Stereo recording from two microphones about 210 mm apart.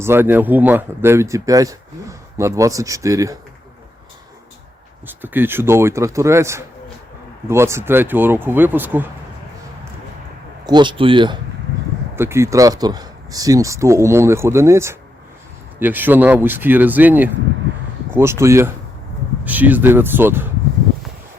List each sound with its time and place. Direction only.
0.0 s speech: 10° right (ahead or behind)
5.0 s speech: 10° right (ahead or behind)
10.7 s speech: 20° right (ahead or behind)
12.1 s speech: 10° right (ahead or behind)